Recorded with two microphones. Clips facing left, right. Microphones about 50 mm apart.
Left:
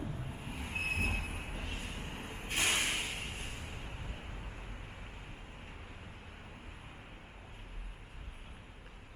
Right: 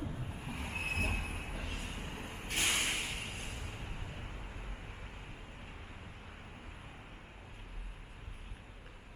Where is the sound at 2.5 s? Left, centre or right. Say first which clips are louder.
Left 1 dB; centre.